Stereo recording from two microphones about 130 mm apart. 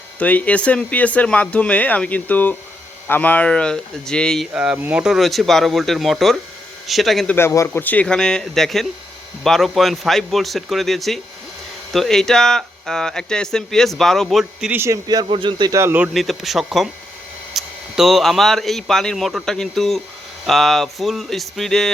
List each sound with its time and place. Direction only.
0.2 s speech: 10° left (ahead or behind)
4.5 s speech: 10° right (ahead or behind)
7.3 s speech: 20° left (ahead or behind); by 14.7 s centre (ahead or behind)
14.7 s speech: 20° right (ahead or behind)
15.0 s a man's voice: 35° right (ahead or behind)
15.8 s speech: 15° right (ahead or behind)
16.1 s speech: centre (ahead or behind)